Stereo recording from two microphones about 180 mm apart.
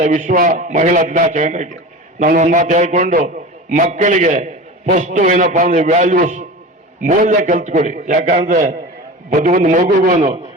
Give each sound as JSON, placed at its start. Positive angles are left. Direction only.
{"t": 0.0, "sound": "a man's voice", "side_deg": -45}